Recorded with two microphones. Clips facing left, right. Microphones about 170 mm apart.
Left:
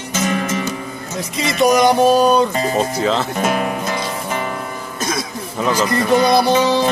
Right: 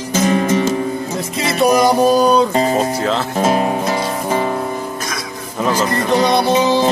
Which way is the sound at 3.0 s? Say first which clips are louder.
Even; centre (ahead or behind).